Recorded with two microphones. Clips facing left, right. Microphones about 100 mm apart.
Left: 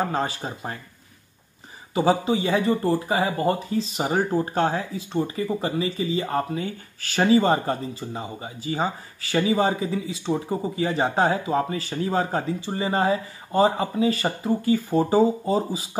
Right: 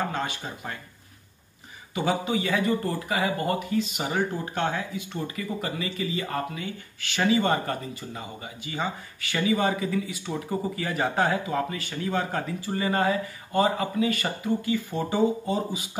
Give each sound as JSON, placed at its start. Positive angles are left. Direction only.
{"t": 0.1, "sound": "speech", "side_deg": 35}
{"t": 2.0, "sound": "speech", "side_deg": 30}